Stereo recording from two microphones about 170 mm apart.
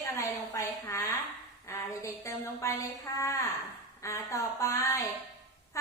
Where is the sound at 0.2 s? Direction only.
15° left (ahead or behind).